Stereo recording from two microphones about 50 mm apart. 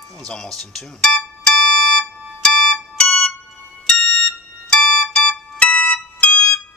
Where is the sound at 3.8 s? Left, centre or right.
Centre.